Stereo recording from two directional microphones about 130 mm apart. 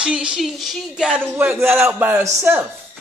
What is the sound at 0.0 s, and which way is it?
Speech, 5° right (ahead or behind).